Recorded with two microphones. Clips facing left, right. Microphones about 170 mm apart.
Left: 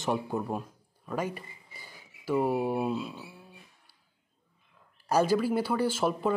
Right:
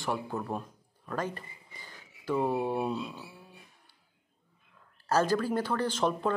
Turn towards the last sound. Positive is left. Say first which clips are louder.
# left 2 dB
turn(degrees=5)  # may be behind; listen again after turning